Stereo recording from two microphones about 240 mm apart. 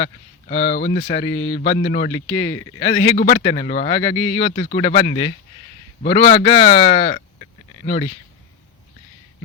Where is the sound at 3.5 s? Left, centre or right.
Left.